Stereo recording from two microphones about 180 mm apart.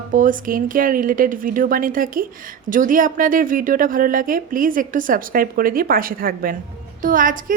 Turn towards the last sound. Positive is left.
turn(degrees=-50)  # may be behind; listen again after turning